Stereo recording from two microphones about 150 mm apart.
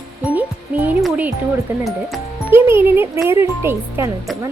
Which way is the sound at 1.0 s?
5° right (ahead or behind).